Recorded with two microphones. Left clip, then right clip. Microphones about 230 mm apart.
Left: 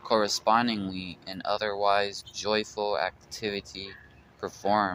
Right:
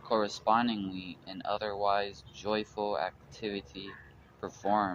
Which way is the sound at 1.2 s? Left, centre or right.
Left.